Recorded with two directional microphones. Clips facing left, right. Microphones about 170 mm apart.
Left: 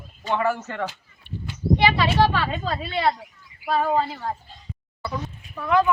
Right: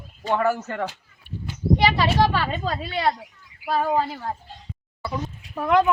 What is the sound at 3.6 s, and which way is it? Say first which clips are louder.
Speech: even; 10° right (ahead or behind).